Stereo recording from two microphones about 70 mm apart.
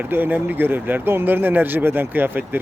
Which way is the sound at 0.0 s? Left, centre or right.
Right.